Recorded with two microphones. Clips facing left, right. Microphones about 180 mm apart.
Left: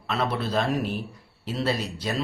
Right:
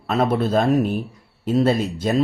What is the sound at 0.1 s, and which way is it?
Speech, 45° right (ahead or behind).